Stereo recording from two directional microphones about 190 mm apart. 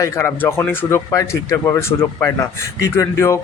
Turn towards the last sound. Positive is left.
turn(degrees=15)  # may be behind; listen again after turning